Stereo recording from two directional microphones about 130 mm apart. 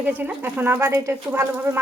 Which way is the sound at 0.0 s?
10° right (ahead or behind).